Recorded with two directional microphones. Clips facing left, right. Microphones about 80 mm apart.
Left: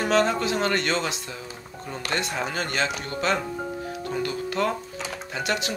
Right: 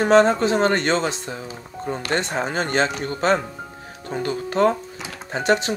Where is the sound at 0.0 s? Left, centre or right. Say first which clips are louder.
Right 7 dB; right.